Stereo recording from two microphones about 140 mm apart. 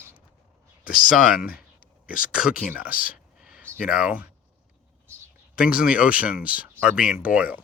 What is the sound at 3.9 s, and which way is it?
Speech, 10° right (ahead or behind).